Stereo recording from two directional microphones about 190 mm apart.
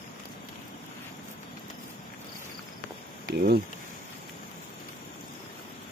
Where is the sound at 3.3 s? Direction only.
55° right (ahead or behind).